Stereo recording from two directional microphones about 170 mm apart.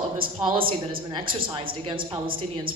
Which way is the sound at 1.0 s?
30° right (ahead or behind).